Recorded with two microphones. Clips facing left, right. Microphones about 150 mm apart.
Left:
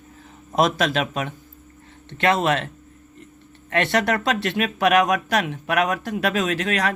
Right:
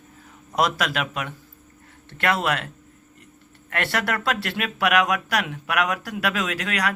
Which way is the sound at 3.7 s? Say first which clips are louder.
Left 5 dB; 20° left (ahead or behind).